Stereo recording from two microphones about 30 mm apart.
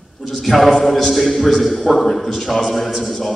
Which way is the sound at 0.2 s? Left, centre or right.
Centre.